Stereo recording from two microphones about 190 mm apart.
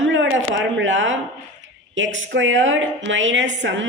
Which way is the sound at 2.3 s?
80° right.